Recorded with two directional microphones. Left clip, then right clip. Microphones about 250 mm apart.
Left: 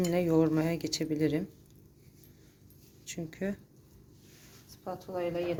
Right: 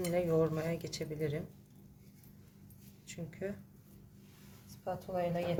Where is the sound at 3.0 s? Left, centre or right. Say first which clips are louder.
Left 5 dB; left.